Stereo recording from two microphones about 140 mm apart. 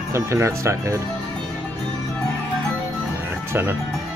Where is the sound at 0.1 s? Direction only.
20° right (ahead or behind).